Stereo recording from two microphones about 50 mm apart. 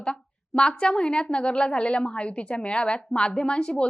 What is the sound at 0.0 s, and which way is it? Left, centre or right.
A woman's voice, centre.